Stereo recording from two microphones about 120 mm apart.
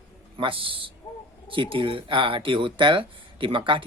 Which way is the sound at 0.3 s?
45° right (ahead or behind).